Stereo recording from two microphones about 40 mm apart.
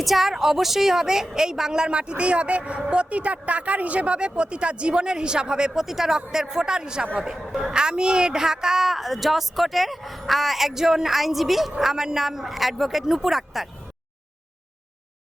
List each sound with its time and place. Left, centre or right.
0.0 s a woman's voice: centre; by 5.7 s right
5.7 s a woman's voice: centre